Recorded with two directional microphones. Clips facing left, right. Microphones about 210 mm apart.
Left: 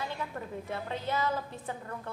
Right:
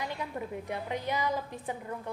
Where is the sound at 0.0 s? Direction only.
15° right (ahead or behind).